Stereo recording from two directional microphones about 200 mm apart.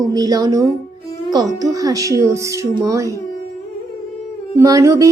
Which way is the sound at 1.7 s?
15° right (ahead or behind).